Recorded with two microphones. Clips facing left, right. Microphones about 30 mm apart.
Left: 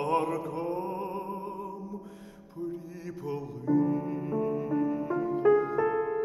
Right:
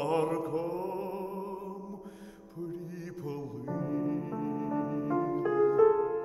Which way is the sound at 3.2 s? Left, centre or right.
Centre.